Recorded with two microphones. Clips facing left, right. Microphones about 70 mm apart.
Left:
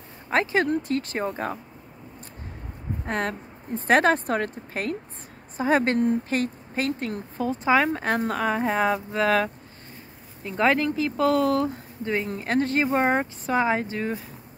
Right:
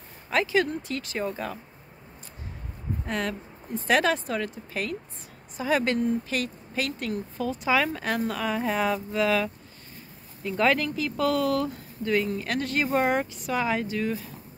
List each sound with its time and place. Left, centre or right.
0.3 s speech: left
3.1 s speech: left
10.4 s speech: left